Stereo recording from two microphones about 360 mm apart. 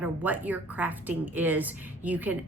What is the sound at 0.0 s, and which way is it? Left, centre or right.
Speech, centre.